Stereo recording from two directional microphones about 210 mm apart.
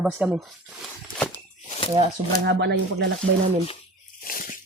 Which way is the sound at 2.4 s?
55° right (ahead or behind).